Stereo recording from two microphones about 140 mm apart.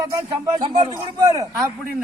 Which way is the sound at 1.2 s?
25° right (ahead or behind).